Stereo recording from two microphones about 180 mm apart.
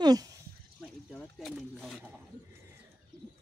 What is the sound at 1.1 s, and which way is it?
Speech, centre (ahead or behind).